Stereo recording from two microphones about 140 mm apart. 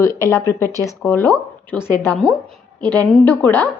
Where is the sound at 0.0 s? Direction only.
20° left (ahead or behind).